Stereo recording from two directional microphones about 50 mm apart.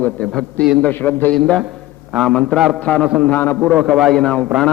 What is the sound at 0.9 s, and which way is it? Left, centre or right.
Speech, left.